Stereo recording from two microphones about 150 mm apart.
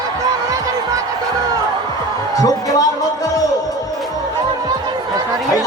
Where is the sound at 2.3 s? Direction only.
25° left (ahead or behind).